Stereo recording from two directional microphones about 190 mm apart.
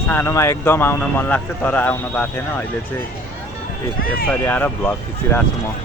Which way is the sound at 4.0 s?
50° left (ahead or behind).